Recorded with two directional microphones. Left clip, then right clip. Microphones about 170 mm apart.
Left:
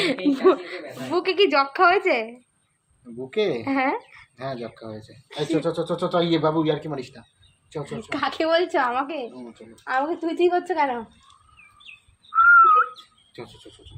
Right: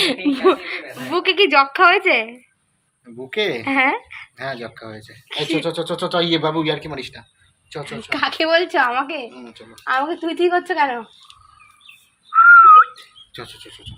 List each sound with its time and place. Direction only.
0.0 s a woman's voice: 25° right (ahead or behind)
3.2 s speech: 5° left (ahead or behind)
3.6 s speech: 25° right (ahead or behind)
4.4 s speech: 5° left (ahead or behind)
5.3 s a woman's voice: 20° right (ahead or behind)
5.6 s speech: 10° left (ahead or behind)
7.8 s a woman's voice: 15° right (ahead or behind)
9.4 s speech: 20° left (ahead or behind)
9.8 s a woman's voice: 15° right (ahead or behind)
12.3 s whistling: centre (ahead or behind)